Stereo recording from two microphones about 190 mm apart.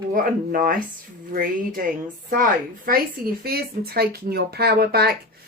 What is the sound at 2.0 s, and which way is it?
Speech, 45° right (ahead or behind).